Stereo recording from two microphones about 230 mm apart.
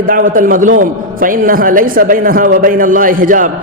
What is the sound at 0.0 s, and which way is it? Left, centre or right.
A man's voice, right.